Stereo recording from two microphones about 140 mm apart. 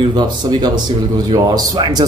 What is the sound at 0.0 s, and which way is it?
Speech, 30° right (ahead or behind).